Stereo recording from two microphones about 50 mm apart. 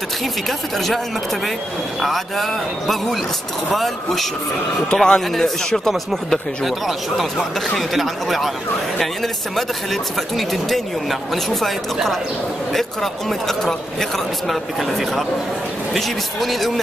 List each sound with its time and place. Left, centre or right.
0.2 s speech: centre
4.9 s speech: centre
6.6 s speech: centre